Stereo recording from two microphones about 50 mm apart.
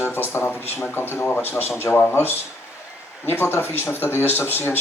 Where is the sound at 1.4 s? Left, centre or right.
Left.